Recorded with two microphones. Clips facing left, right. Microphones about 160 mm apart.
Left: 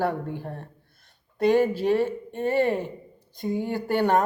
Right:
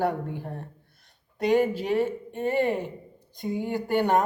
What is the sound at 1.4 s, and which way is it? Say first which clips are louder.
Speech: left 2 dB; 15° right (ahead or behind).